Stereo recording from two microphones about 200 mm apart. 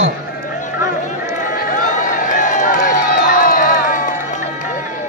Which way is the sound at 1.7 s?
40° left (ahead or behind).